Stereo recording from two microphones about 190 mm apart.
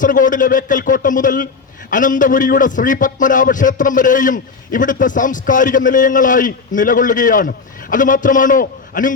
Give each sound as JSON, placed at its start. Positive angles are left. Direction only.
{"t": 0.0, "sound": "a man's voice", "side_deg": 45}